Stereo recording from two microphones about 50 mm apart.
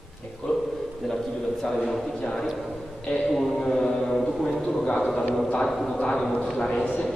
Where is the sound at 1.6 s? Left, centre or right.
Centre.